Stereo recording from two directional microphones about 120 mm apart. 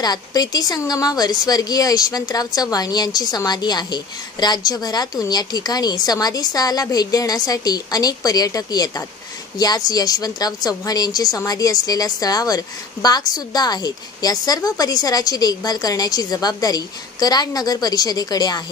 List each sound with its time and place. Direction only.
0.0 s speech: 35° left (ahead or behind)